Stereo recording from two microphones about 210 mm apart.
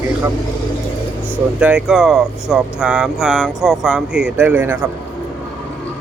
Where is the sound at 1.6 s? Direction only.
5° right (ahead or behind).